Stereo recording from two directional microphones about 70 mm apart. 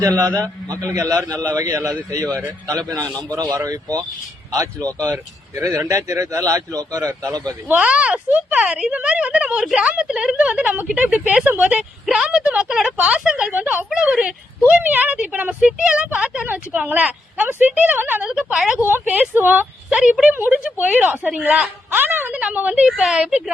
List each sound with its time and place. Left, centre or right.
0.4 s a man's voice: right
7.8 s speech: centre
11.4 s a woman's voice: right
12.0 s speech: centre
13.5 s a woman's voice: right
13.9 s speech: centre
14.7 s a woman's voice: right
18.5 s speech: centre
18.9 s a woman's voice: right
19.9 s speech: centre
20.3 s a woman's voice: right